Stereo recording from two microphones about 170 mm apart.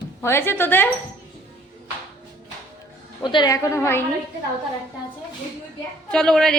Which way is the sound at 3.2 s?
25° left (ahead or behind).